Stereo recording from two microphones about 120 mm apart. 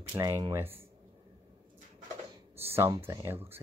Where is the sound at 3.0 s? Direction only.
25° right (ahead or behind).